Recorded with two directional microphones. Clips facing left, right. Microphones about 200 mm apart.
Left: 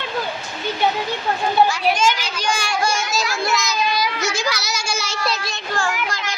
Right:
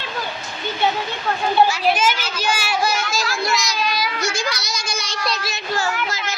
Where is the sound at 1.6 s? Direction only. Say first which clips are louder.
Even; 5° right (ahead or behind).